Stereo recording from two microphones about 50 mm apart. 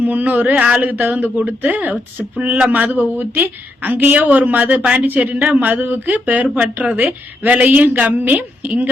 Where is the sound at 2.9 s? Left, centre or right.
Right.